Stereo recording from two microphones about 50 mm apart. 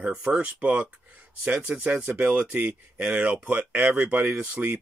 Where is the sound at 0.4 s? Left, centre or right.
Right.